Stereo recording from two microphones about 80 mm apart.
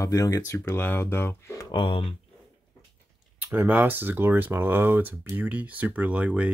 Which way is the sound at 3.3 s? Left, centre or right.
Right.